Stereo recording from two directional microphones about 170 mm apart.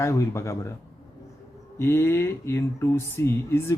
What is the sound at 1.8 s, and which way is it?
Speech, 15° left (ahead or behind).